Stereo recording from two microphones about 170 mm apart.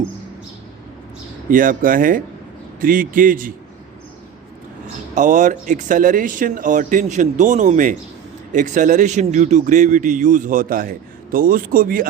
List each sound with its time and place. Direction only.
1.5 s speech: 55° right (ahead or behind)
5.1 s speech: 45° right (ahead or behind)